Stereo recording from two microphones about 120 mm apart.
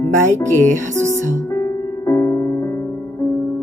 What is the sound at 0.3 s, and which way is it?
Music, 15° left (ahead or behind).